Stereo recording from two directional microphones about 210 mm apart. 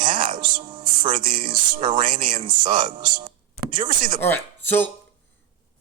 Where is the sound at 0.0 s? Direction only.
25° right (ahead or behind).